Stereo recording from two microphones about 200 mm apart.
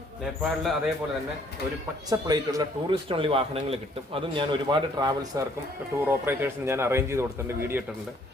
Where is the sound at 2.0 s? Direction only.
20° right (ahead or behind).